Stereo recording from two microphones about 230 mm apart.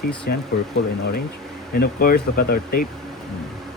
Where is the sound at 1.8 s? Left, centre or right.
Left.